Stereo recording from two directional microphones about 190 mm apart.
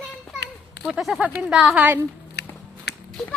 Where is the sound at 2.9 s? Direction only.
60° left (ahead or behind).